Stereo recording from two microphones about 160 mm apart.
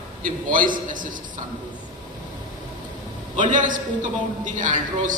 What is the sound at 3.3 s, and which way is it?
A woman's voice, 55° right (ahead or behind).